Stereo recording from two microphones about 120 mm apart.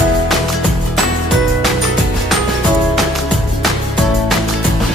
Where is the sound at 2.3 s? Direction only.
Centre (ahead or behind).